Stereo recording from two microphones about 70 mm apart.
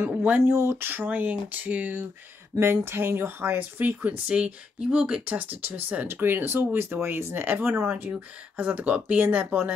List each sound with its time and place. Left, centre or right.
0.1 s speech: right
0.6 s speech: right
2.6 s speech: right
8.1 s speech: right